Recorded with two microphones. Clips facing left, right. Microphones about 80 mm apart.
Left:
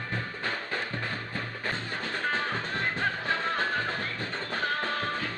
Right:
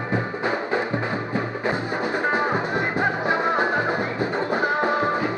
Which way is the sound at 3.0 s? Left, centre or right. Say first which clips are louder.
Right 9 dB; centre.